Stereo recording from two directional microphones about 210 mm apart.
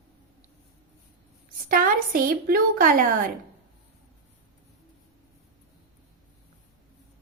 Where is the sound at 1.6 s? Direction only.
40° right (ahead or behind).